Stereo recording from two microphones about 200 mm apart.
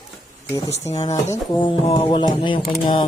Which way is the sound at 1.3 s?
25° left (ahead or behind).